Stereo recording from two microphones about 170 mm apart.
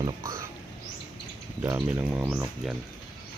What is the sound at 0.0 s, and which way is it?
Speech, 20° right (ahead or behind).